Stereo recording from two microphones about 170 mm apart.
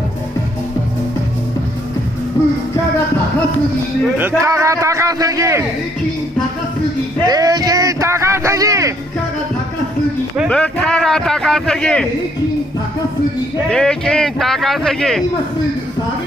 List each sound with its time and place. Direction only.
4.2 s a man's voice: 15° right (ahead or behind)
7.2 s speech: 25° right (ahead or behind)
10.5 s speech: 5° left (ahead or behind)
13.7 s speech: 5° left (ahead or behind)